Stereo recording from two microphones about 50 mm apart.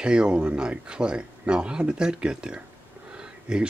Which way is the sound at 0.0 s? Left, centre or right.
Centre.